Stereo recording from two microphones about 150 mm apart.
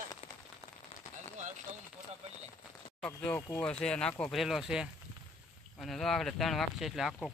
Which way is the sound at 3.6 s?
5° left (ahead or behind).